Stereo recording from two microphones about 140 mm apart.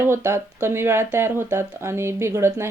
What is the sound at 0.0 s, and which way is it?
Speech, 20° right (ahead or behind).